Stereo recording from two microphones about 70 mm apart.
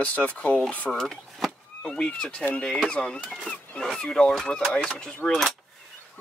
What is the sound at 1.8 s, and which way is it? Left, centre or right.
Speech, centre.